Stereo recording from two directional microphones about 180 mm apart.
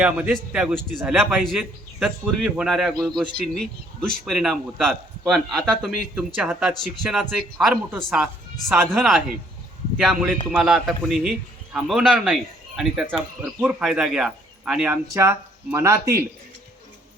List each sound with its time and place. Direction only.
0.0 s a man's voice: 5° right (ahead or behind)
15.1 s speech: 15° right (ahead or behind)